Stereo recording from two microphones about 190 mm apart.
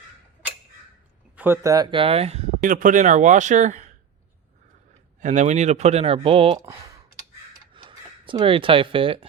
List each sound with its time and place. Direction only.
1.4 s speech: 15° right (ahead or behind); by 3.9 s 40° right (ahead or behind)
5.2 s speech: 40° right (ahead or behind)
6.6 s speech: 15° right (ahead or behind)
7.7 s a sound: 25° right (ahead or behind)